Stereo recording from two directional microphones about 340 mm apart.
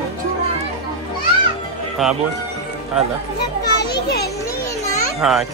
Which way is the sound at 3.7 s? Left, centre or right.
Left.